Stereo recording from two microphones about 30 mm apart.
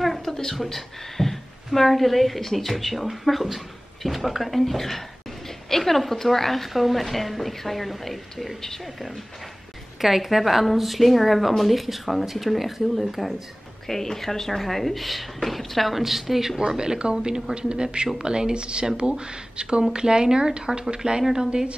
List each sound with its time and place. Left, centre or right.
0.0 s a sound: centre
0.3 s a sound: centre
0.7 s a woman's voice: centre
13.8 s a woman's voice: centre
16.5 s speech: right
21.2 s a woman's voice: centre